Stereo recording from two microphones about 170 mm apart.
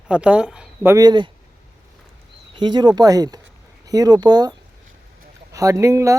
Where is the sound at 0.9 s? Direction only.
25° right (ahead or behind).